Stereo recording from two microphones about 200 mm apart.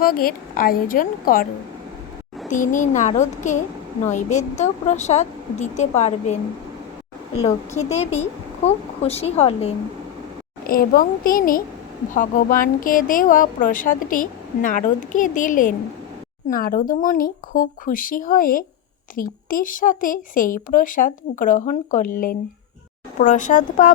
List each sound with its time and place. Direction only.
0.0 s a woman's voice: 45° left (ahead or behind)
2.5 s a woman's voice: 40° left (ahead or behind)
7.4 s a woman's voice: 35° left (ahead or behind)
10.6 s a woman's voice: 45° left (ahead or behind)